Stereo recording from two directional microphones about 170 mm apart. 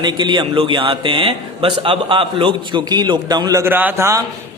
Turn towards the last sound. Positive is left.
turn(degrees=-20)  # may be behind; listen again after turning